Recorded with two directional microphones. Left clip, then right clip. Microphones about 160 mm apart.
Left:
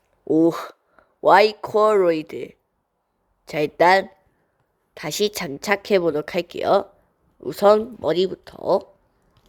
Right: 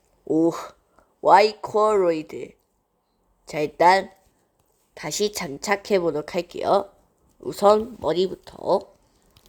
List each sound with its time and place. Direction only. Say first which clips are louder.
0.3 s speech: left 3 dB; 20° left (ahead or behind)